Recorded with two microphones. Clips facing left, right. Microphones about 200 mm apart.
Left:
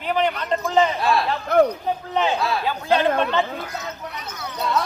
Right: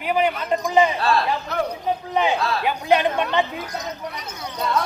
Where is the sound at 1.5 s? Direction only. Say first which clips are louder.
Left 12 dB; 50° left (ahead or behind).